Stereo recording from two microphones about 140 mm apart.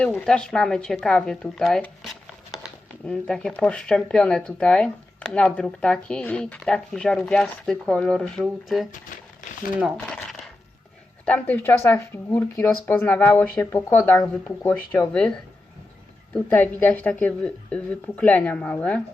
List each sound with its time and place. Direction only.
0.2 s speech: 5° left (ahead or behind)
10.1 s coin: 5° left (ahead or behind)
11.3 s speech: 10° left (ahead or behind)
14.6 s speech: 15° left (ahead or behind)